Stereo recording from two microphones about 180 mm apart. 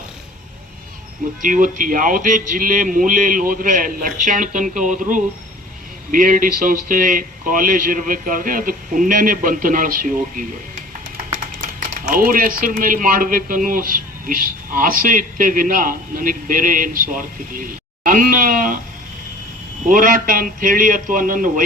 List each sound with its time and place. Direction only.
1.4 s a man's voice: 50° right (ahead or behind)
19.9 s speech: 50° right (ahead or behind)